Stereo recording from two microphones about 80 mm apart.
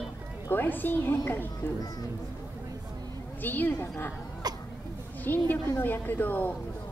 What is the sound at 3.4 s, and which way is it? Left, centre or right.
Speech, left.